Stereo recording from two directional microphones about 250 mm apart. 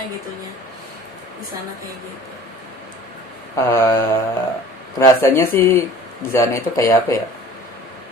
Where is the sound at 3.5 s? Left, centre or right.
Centre.